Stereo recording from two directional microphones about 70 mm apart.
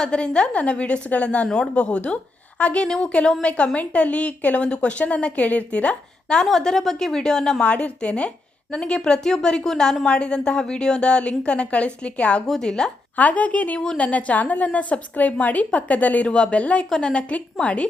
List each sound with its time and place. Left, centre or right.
0.0 s speech: centre
1.5 s speech: centre
1.7 s speech: centre
7.6 s speech: centre
12.5 s speech: centre
13.1 s a woman's voice: left